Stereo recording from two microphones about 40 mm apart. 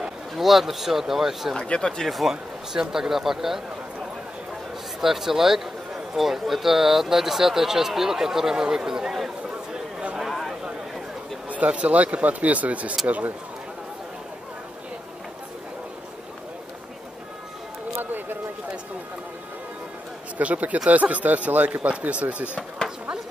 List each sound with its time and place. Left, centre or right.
0.4 s speech: centre
1.6 s speech: left
2.2 s speech: centre
5.0 s speech: centre
10.1 s a sound: centre
11.4 s speech: right
20.3 s speech: right